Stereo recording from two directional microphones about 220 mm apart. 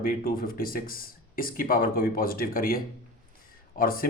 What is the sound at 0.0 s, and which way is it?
Speech, 40° left (ahead or behind).